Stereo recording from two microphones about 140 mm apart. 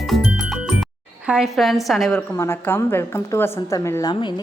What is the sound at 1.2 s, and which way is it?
Speech, centre (ahead or behind).